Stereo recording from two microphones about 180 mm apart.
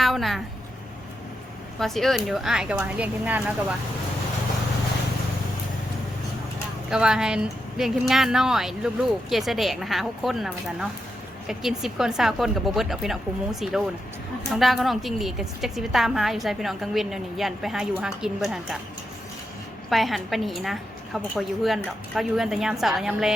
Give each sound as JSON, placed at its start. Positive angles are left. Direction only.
{"t": 0.0, "sound": "a woman's voice", "side_deg": 0}
{"t": 1.8, "sound": "a woman's voice", "side_deg": 0}
{"t": 6.9, "sound": "a woman's voice", "side_deg": -5}
{"t": 19.9, "sound": "a woman's voice", "side_deg": 0}